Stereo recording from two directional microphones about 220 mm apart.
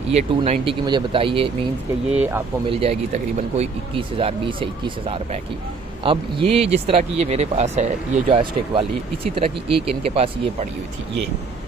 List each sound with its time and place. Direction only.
0.1 s speech: 25° right (ahead or behind)
2.0 s speech: 5° right (ahead or behind)
2.7 s speech: 25° right (ahead or behind)